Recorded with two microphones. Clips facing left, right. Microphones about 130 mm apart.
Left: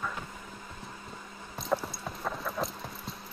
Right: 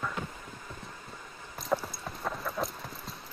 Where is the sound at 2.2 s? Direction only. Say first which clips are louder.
Even; centre (ahead or behind).